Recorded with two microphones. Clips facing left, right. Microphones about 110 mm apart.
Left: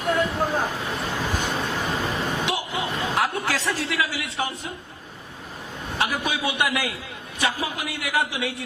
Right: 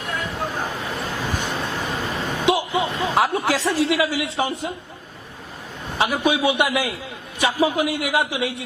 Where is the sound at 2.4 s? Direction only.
20° right (ahead or behind).